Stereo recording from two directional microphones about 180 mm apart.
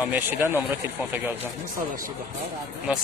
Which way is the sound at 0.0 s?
10° right (ahead or behind).